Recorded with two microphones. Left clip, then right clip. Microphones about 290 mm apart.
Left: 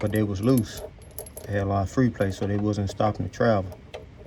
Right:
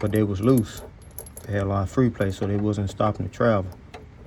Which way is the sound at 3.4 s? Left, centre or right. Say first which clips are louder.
Right 1 dB; left.